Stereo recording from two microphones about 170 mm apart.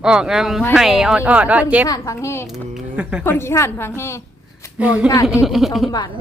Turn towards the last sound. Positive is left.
turn(degrees=0)  # may be behind; listen again after turning